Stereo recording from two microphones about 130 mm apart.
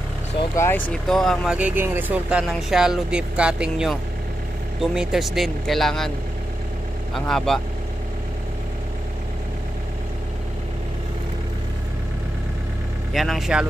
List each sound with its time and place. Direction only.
0.6 s speech: 15° left (ahead or behind)
1.1 s speech: centre (ahead or behind)
7.2 s speech: 5° left (ahead or behind)
13.1 s speech: centre (ahead or behind)